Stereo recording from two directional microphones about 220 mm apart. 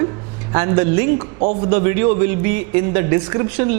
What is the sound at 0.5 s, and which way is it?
A man's voice, 20° right (ahead or behind).